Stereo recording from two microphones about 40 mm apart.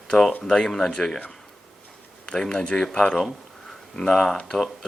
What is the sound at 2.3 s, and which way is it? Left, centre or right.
Speech, left.